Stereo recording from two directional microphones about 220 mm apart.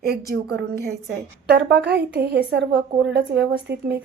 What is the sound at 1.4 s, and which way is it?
A woman's voice, 50° right (ahead or behind).